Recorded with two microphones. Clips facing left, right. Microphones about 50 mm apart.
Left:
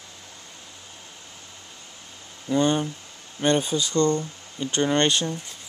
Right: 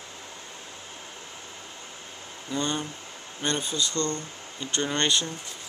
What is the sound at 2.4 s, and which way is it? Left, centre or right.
Speech, centre.